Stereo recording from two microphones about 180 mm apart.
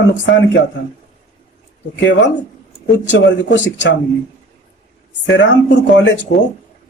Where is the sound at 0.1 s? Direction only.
75° left (ahead or behind).